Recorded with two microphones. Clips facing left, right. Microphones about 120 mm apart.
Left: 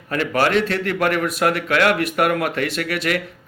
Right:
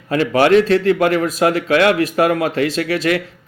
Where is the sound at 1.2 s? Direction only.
30° right (ahead or behind).